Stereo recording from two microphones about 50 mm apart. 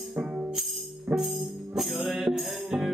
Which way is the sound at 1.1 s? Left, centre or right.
Centre.